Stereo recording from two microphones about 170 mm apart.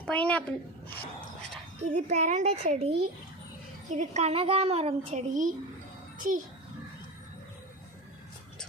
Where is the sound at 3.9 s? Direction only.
45° right (ahead or behind).